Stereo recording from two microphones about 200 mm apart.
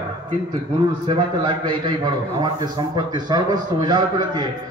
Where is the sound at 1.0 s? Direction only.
25° right (ahead or behind).